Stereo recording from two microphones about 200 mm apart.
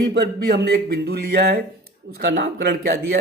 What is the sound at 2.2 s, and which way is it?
Speech, 55° right (ahead or behind).